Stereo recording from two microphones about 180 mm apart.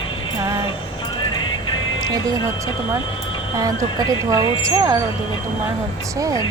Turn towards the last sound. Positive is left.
turn(degrees=-20)  # may be behind; listen again after turning